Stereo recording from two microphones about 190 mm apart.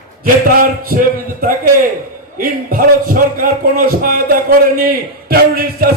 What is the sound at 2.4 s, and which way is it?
A man's voice, 50° right (ahead or behind).